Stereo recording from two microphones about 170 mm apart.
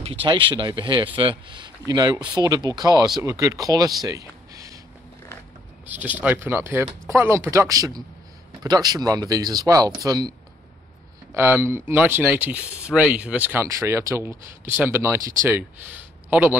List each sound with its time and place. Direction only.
0.0 s speech: 30° right (ahead or behind)
4.0 s a sound: 20° right (ahead or behind)
5.9 s speech: 10° right (ahead or behind)
11.3 s speech: 15° right (ahead or behind)